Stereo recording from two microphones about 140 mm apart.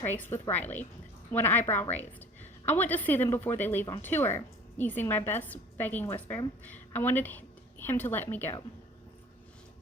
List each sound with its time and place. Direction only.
0.0 s a woman's voice: 15° left (ahead or behind)